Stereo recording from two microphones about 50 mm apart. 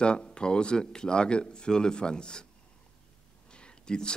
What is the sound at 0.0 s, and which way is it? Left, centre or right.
A man's voice, centre.